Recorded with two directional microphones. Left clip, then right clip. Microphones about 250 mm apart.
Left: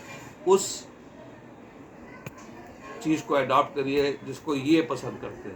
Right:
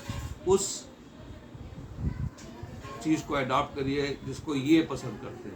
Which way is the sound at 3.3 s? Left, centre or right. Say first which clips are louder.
Left 9 dB; centre.